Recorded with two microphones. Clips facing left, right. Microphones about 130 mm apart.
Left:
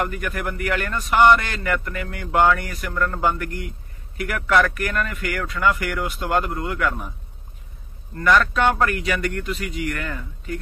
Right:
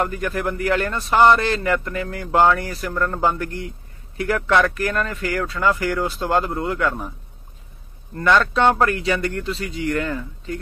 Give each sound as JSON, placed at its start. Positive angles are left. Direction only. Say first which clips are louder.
{"t": 0.0, "sound": "speech", "louder": "right 3 dB", "side_deg": -30}
{"t": 8.2, "sound": "speech", "louder": "right 1 dB", "side_deg": -25}